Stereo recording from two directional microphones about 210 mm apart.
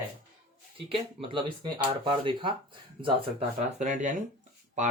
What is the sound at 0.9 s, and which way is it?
Speech, 25° right (ahead or behind).